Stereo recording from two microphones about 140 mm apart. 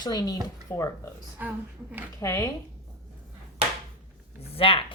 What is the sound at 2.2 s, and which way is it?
Speech, 20° left (ahead or behind).